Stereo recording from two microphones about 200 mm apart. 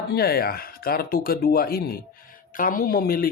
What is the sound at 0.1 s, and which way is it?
Speech, 50° left (ahead or behind).